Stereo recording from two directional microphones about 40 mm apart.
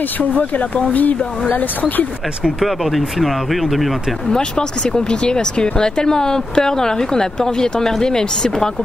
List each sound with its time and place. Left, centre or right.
0.3 s speech: left
2.6 s speech: centre
4.3 s speech: centre